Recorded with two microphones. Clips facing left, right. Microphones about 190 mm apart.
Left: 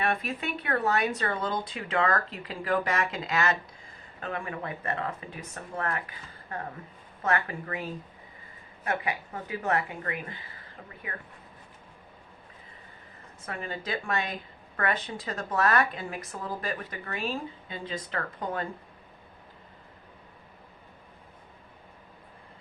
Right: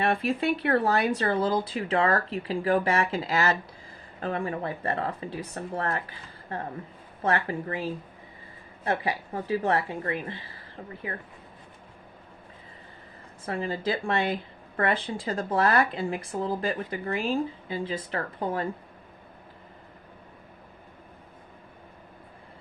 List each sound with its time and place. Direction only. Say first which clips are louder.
0.0 s speech: right 5 dB; 30° right (ahead or behind)
13.4 s speech: right 7 dB; 30° right (ahead or behind)